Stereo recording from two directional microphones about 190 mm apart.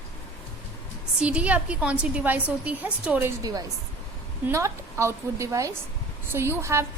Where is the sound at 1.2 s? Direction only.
5° right (ahead or behind).